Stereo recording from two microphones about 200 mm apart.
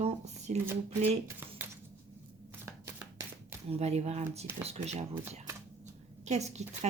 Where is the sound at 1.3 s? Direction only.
10° right (ahead or behind).